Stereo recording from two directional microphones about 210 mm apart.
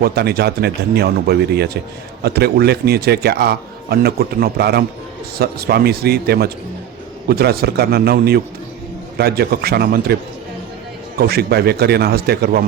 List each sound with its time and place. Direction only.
0.0 s speech: 50° right (ahead or behind)
11.2 s speech: 50° right (ahead or behind)